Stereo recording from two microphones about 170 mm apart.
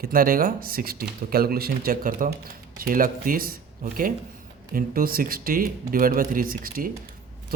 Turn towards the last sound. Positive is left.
turn(degrees=-55)  # may be behind; listen again after turning